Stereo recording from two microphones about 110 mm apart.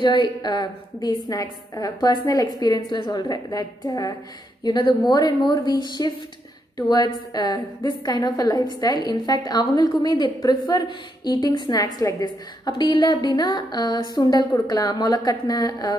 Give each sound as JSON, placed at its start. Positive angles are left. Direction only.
{"t": 0.0, "sound": "a woman's voice", "side_deg": 45}
{"t": 4.6, "sound": "a woman's voice", "side_deg": 45}